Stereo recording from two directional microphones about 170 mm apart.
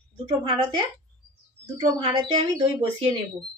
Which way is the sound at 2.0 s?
30° right (ahead or behind).